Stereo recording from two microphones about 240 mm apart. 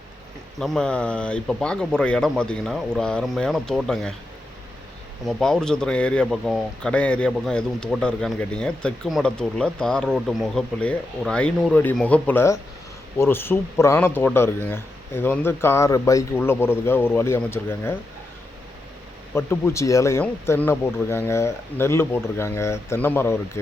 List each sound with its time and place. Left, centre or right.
0.6 s speech: centre
5.2 s speech: centre
19.3 s speech: centre